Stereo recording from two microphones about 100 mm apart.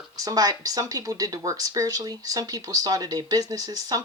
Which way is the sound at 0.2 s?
40° right (ahead or behind).